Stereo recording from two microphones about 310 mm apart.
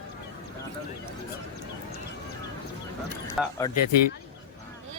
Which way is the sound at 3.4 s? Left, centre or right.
Centre.